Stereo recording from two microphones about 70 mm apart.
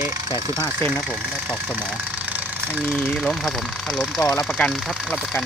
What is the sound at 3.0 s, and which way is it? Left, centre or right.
Speech, centre.